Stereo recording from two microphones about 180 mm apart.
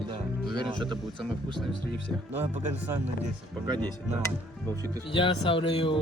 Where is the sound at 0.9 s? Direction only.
Centre (ahead or behind).